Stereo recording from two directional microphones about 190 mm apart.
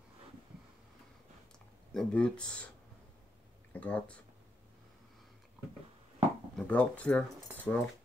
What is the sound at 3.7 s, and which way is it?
Speech, 5° left (ahead or behind).